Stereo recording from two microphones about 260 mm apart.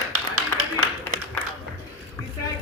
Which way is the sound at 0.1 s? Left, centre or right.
Right.